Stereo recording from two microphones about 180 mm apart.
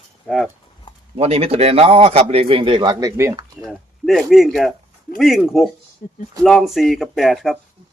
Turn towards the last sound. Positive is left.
turn(degrees=0)  # may be behind; listen again after turning